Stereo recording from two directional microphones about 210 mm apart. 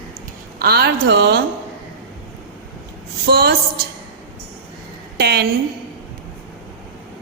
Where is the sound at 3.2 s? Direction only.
50° right (ahead or behind).